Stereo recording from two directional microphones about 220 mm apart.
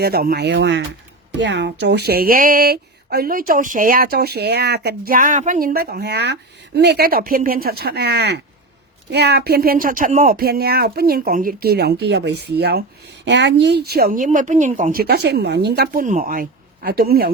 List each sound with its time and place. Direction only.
0.0 s speech: 45° right (ahead or behind)